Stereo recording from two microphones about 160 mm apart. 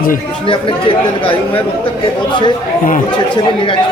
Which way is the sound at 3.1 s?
30° left (ahead or behind).